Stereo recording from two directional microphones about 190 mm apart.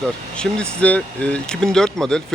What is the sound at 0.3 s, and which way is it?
Speech, 5° left (ahead or behind).